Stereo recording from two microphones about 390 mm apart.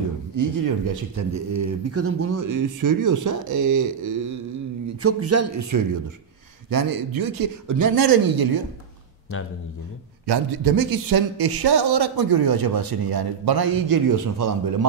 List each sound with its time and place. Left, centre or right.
0.4 s speech: right
5.0 s a man's voice: right
6.7 s speech: right
10.2 s speech: right